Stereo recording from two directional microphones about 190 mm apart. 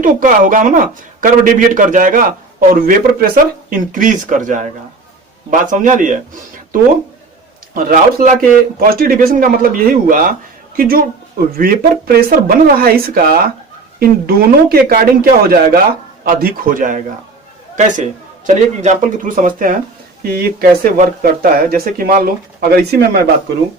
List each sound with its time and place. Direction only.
0.0 s a man's voice: 45° right (ahead or behind)
7.7 s a man's voice: 50° right (ahead or behind)